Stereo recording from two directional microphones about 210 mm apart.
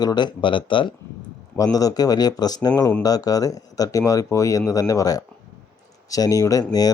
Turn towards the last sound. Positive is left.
turn(degrees=15)  # may be behind; listen again after turning